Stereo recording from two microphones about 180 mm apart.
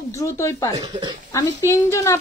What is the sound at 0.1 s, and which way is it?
Speech, 15° left (ahead or behind).